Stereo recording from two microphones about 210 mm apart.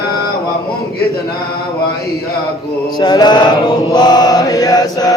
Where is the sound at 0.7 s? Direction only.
45° left (ahead or behind).